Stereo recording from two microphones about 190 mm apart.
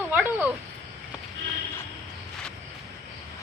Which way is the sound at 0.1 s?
10° right (ahead or behind).